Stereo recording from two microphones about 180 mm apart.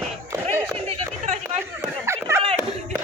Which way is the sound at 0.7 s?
35° right (ahead or behind).